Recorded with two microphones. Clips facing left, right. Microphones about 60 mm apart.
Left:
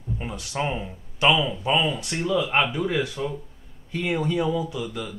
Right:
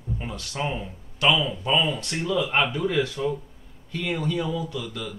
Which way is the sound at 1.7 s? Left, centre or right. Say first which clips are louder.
Right 1 dB; centre.